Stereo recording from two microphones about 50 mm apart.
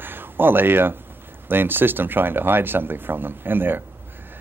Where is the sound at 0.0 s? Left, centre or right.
Right.